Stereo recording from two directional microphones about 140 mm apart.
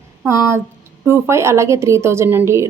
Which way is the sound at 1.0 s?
20° right (ahead or behind).